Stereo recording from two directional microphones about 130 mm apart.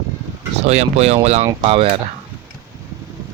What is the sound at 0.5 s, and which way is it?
Speech, 55° right (ahead or behind).